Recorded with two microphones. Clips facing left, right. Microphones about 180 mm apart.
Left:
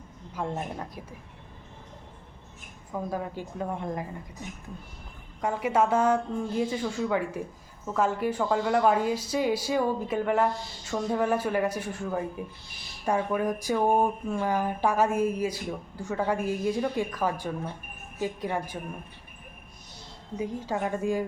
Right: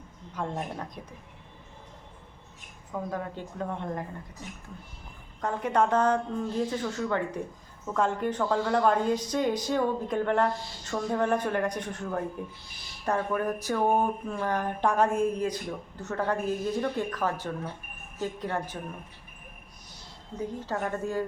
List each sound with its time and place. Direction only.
0.3 s speech: 10° left (ahead or behind)
2.9 s speech: 10° left (ahead or behind)
5.4 s speech: 10° left (ahead or behind)
20.4 s speech: 10° left (ahead or behind)